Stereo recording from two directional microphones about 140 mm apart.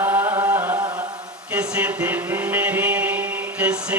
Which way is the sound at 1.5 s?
10° right (ahead or behind).